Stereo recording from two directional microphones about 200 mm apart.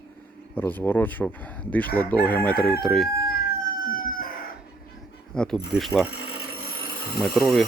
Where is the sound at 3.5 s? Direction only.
45° left (ahead or behind).